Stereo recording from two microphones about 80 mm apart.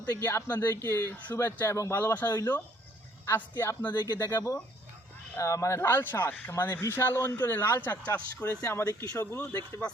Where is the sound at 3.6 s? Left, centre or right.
Left.